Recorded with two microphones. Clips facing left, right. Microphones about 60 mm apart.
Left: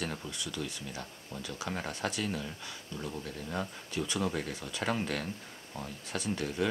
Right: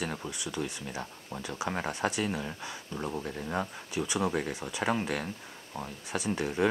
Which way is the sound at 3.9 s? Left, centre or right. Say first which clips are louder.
Right 3 dB; centre.